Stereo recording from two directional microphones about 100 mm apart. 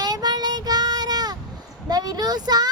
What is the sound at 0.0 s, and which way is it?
Child singing, 40° right (ahead or behind).